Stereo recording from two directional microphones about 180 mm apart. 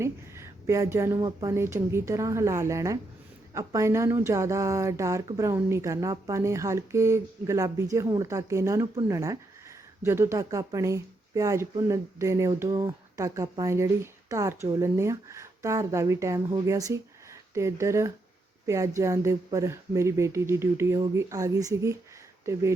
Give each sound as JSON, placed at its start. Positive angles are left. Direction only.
{"t": 0.0, "sound": "speech", "side_deg": -15}